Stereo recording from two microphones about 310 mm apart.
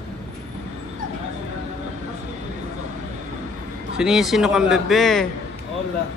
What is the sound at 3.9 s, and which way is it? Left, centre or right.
A man's voice, centre.